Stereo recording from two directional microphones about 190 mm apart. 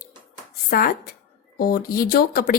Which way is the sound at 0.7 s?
50° left (ahead or behind).